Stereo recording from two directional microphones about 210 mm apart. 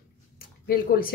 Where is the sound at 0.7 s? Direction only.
45° left (ahead or behind).